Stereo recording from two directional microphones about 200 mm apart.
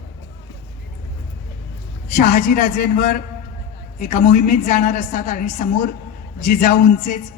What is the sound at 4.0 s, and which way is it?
A man's voice, 35° left (ahead or behind).